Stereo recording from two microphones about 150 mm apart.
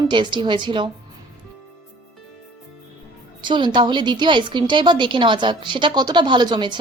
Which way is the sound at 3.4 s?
30° right (ahead or behind).